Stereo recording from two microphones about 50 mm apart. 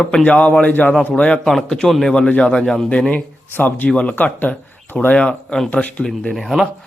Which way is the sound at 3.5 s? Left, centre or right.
Left.